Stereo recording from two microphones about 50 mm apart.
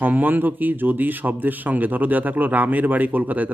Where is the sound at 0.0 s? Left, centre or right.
Right.